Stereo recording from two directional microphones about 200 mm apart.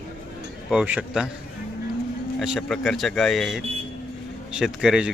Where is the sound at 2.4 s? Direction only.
Centre (ahead or behind).